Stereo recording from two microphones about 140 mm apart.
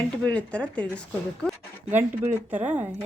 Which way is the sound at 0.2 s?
10° left (ahead or behind).